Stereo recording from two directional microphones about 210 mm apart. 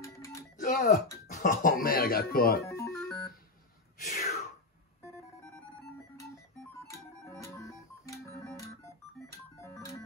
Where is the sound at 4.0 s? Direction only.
35° left (ahead or behind).